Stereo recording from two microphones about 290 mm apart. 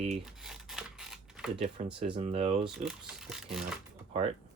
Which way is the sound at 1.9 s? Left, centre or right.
Centre.